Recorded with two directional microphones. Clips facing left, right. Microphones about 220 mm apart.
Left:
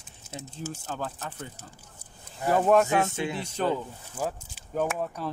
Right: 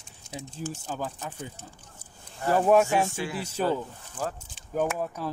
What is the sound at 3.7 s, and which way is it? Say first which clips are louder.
Speech: right 1 dB; 10° left (ahead or behind).